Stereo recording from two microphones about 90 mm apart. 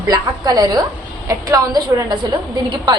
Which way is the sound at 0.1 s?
50° right (ahead or behind).